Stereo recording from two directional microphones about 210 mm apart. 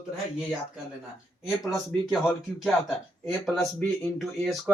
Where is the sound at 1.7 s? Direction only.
Centre (ahead or behind).